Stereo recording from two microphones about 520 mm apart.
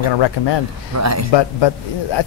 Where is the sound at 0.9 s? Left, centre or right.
Right.